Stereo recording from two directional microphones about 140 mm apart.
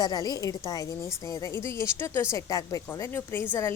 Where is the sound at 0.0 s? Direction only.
30° left (ahead or behind).